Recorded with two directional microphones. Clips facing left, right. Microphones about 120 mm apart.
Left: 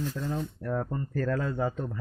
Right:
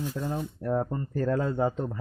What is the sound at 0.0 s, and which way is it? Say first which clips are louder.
Speech: right 1 dB; 15° right (ahead or behind).